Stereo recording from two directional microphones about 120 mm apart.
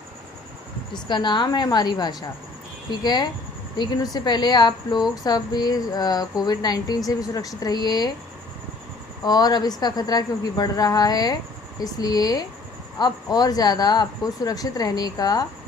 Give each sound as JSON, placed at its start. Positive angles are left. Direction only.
{"t": 0.9, "sound": "speech", "side_deg": 40}
{"t": 9.2, "sound": "speech", "side_deg": 35}